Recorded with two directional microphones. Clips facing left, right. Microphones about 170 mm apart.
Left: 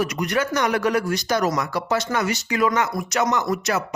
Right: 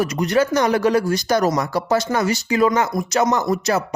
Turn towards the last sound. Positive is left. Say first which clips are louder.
# right 4 dB
turn(degrees=-30)  # may be behind; listen again after turning